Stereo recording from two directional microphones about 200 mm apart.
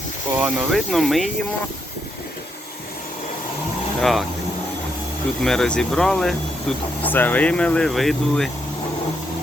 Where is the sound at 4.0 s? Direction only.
Centre (ahead or behind).